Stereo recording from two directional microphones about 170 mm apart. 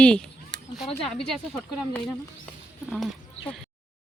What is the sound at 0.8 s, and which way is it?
Speech, 35° left (ahead or behind).